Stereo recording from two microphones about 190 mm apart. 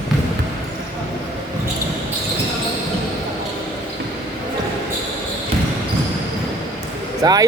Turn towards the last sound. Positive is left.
turn(degrees=-20)  # may be behind; listen again after turning